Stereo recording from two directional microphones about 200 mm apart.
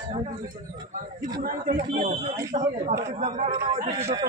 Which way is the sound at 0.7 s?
20° right (ahead or behind).